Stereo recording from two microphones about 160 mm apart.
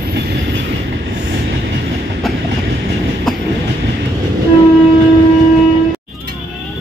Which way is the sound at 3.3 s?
Centre (ahead or behind).